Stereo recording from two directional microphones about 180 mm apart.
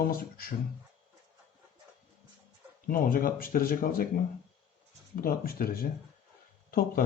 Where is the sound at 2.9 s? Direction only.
50° left (ahead or behind).